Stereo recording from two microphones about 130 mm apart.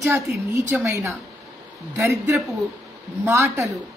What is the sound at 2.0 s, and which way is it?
A woman's voice, 25° right (ahead or behind).